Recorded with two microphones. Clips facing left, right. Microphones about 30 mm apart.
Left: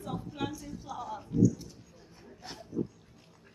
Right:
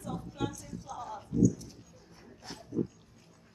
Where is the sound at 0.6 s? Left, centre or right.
Centre.